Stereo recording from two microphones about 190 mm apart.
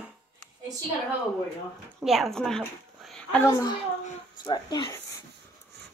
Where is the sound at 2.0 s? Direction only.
Centre (ahead or behind).